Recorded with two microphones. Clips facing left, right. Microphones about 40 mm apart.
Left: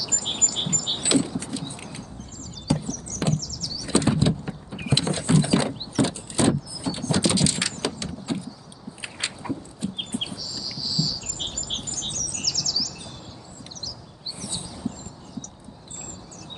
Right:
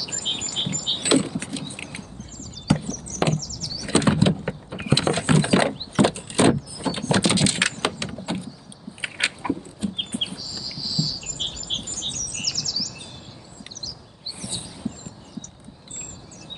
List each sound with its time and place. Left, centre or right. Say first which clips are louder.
0.0 s bird: even; right
1.1 s keys jangling: right 2 dB; right
1.6 s a sound: right 1 dB; right
2.7 s chop: right 2 dB; right
3.8 s vehicle: right 2 dB; right
4.8 s a sound: right 3 dB; right
9.0 s biting: right 7 dB; right
9.9 s chirp: right 2 dB; right
14.4 s a sound: right 1 dB; centre